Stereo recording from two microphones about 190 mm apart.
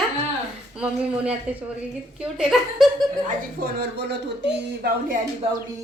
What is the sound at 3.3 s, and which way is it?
Speech, 50° right (ahead or behind).